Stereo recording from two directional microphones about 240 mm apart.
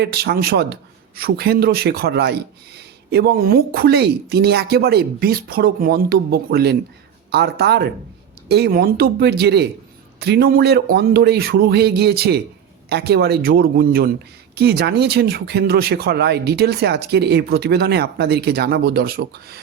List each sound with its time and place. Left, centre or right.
0.0 s a man's voice: right